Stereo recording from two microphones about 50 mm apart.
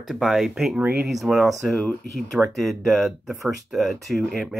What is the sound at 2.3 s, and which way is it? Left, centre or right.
Speech, right.